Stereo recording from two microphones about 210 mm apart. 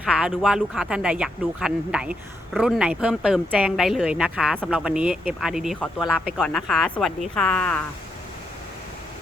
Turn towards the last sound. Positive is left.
turn(degrees=5)  # may be behind; listen again after turning